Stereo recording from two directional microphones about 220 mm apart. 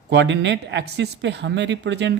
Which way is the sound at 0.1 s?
55° right (ahead or behind).